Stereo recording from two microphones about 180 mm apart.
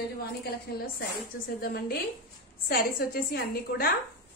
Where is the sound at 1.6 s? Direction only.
60° left (ahead or behind).